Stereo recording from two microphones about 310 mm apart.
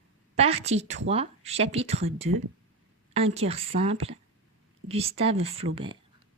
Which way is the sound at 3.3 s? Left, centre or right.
Centre.